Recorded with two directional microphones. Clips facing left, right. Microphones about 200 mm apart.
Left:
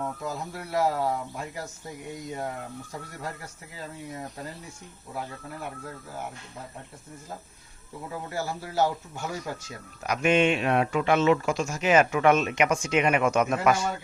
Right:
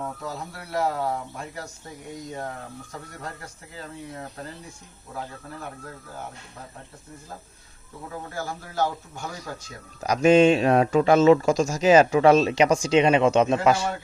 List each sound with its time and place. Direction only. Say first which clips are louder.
0.3 s speech: left 1 dB; 5° left (ahead or behind)
8.3 s speech: left 3 dB; 10° left (ahead or behind)
10.0 s speech: right 6 dB; 35° right (ahead or behind)